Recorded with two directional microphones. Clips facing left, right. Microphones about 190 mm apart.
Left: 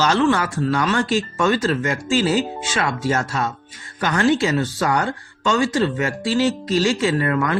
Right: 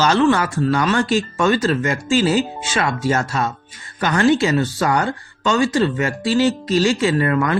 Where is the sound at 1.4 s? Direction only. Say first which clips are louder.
Right 2 dB; 20° right (ahead or behind).